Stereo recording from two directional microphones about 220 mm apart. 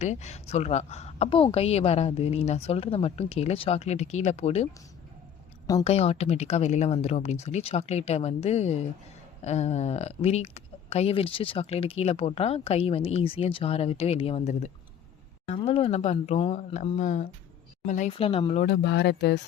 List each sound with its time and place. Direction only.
0.0 s speech: 30° left (ahead or behind)
5.8 s speech: 25° left (ahead or behind)
18.6 s speech: 50° left (ahead or behind)